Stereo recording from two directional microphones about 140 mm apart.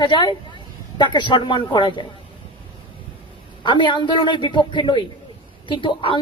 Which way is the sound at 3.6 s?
35° left (ahead or behind).